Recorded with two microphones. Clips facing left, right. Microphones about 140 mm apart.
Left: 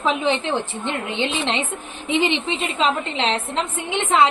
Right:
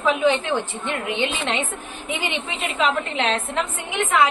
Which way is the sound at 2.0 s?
25° left (ahead or behind).